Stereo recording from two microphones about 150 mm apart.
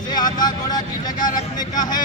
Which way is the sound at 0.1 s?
30° left (ahead or behind).